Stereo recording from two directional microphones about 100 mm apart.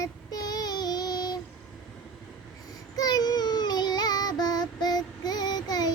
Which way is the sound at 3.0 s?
40° left (ahead or behind).